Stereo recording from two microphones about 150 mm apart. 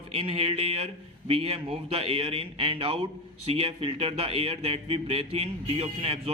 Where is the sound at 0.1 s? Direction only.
40° right (ahead or behind).